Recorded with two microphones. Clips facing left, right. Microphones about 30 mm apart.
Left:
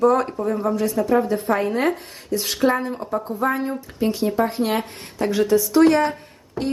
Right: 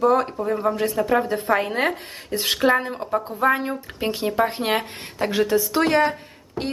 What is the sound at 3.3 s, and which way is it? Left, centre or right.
Speech, right.